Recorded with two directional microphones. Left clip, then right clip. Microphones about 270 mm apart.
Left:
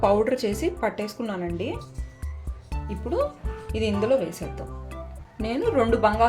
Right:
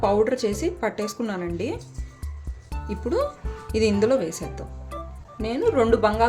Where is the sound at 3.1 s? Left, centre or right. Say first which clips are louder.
Right 1 dB; centre.